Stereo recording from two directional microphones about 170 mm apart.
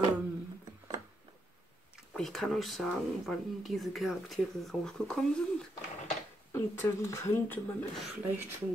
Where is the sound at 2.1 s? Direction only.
Centre (ahead or behind).